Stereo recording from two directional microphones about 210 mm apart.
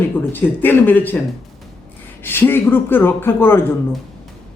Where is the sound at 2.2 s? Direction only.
10° left (ahead or behind).